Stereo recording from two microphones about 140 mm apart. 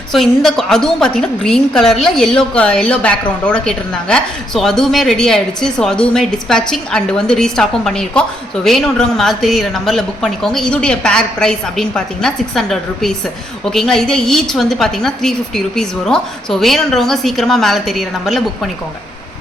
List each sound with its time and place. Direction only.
0.1 s a woman's voice: centre (ahead or behind)